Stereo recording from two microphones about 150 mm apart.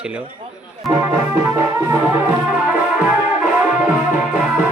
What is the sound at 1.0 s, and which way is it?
Music, 20° right (ahead or behind).